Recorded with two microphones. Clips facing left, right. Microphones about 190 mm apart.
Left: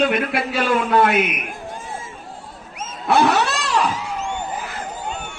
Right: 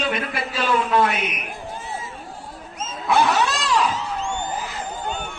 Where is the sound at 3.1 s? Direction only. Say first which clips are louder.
Left 2 dB; 65° left (ahead or behind).